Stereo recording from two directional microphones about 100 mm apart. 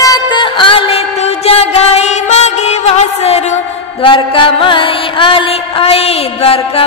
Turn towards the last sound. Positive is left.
turn(degrees=70)  # may be behind; listen again after turning